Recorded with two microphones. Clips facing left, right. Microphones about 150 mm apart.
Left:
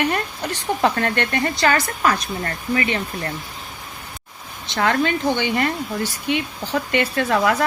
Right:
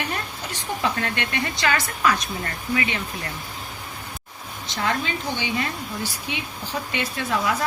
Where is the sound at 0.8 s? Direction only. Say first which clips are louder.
Left 6 dB; 50° left (ahead or behind).